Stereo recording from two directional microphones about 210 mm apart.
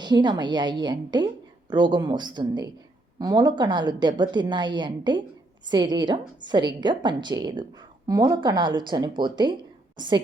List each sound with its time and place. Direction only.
0.0 s a woman's voice: 20° right (ahead or behind)